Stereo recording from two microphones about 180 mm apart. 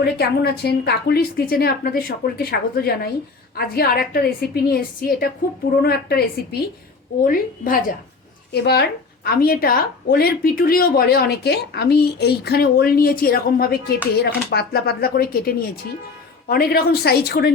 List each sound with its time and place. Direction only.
0.0 s a woman's voice: 60° left (ahead or behind)
8.6 s a woman's voice: 65° left (ahead or behind)